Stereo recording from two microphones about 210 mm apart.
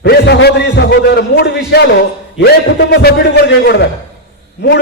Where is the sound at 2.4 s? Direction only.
50° left (ahead or behind).